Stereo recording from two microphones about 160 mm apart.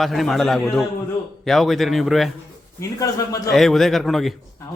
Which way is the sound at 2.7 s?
20° left (ahead or behind).